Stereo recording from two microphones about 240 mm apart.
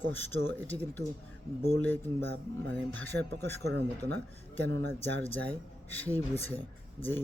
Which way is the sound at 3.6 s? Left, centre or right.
Right.